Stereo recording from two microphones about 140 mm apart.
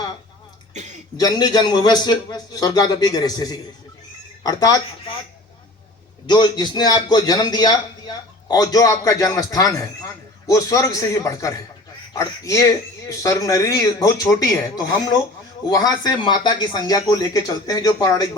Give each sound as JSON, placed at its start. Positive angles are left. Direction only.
{"t": 0.7, "sound": "cough", "side_deg": -55}
{"t": 1.1, "sound": "a man's voice", "side_deg": 30}
{"t": 6.2, "sound": "a man's voice", "side_deg": 30}